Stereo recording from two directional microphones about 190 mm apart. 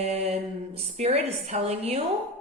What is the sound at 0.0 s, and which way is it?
A woman's voice, 35° right (ahead or behind).